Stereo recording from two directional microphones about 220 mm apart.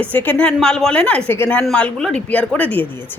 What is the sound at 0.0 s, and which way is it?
Speech, 5° left (ahead or behind).